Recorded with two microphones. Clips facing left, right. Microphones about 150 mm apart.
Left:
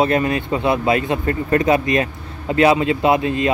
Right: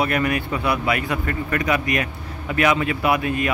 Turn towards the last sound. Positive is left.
turn(degrees=25)  # may be behind; listen again after turning